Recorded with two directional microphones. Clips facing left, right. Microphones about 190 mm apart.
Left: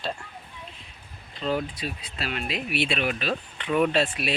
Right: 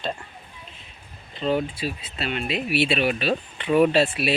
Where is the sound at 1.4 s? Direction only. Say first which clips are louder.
Right 4 dB; centre (ahead or behind).